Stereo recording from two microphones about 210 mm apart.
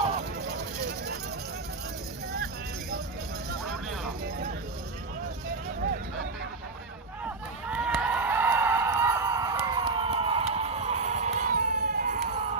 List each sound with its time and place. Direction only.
0.4 s vehicle: 50° right (ahead or behind)
3.7 s music: centre (ahead or behind)
7.3 s a sound: 5° right (ahead or behind); by 12.2 s 40° right (ahead or behind)